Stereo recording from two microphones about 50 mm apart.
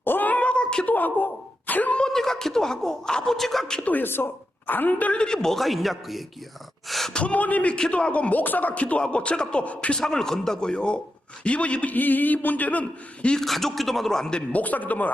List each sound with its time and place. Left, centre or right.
0.0 s a sound: left
0.3 s a sound: left
0.9 s a sound: left
2.0 s a sound: centre
3.3 s a man's voice: centre
3.8 s a man's voice: left
5.1 s a man's voice: centre
6.8 s gasp: centre
7.1 s speech: left
10.0 s a man's voice: centre; by 12.8 s left
13.4 s a man's voice: centre
14.5 s a man's voice: left